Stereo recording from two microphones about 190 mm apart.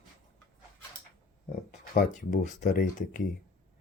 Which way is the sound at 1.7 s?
40° left (ahead or behind).